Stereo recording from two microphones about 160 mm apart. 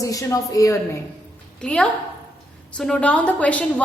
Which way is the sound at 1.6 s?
5° left (ahead or behind).